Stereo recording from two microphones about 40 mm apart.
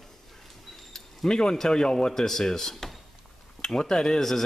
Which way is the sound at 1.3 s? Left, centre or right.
Centre.